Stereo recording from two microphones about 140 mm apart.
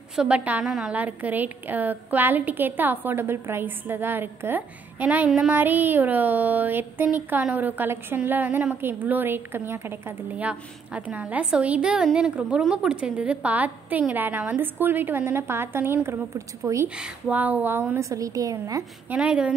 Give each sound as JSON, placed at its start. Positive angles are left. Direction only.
{"t": 0.1, "sound": "a woman's voice", "side_deg": -5}
{"t": 16.9, "sound": "a woman's voice", "side_deg": -10}
{"t": 19.0, "sound": "a woman's voice", "side_deg": -10}